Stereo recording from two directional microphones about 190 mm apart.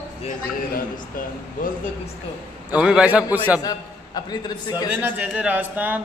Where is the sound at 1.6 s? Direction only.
45° left (ahead or behind).